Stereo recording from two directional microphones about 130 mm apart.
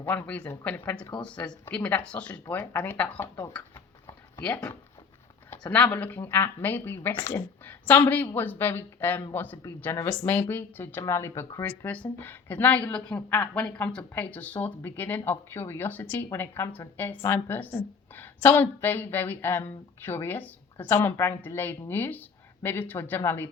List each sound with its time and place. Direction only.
0.0 s speech: 15° left (ahead or behind)